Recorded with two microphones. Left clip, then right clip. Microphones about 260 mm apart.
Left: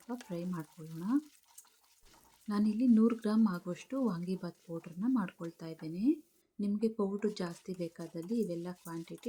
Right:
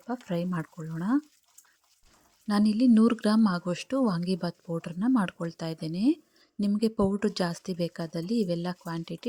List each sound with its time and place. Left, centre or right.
0.1 s speech: right
2.5 s speech: right